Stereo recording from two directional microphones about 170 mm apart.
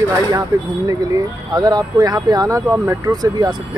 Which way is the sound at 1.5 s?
25° right (ahead or behind).